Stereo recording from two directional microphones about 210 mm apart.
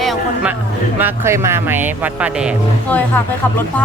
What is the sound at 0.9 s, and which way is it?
Speech, 10° right (ahead or behind).